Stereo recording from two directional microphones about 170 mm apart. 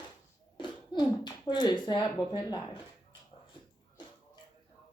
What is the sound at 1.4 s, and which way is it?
Speech, 25° left (ahead or behind).